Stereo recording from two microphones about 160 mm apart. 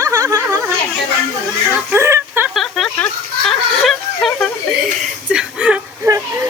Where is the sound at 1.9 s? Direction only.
15° right (ahead or behind).